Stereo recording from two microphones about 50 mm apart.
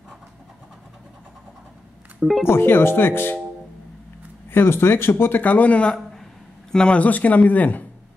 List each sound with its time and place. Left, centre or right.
2.4 s speech: left
4.5 s speech: left
5.2 s speech: left
6.7 s speech: centre
7.0 s speech: left